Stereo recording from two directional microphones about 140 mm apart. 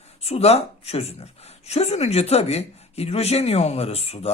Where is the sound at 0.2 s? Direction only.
45° left (ahead or behind).